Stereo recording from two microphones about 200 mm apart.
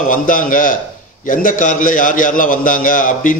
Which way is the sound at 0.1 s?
45° left (ahead or behind).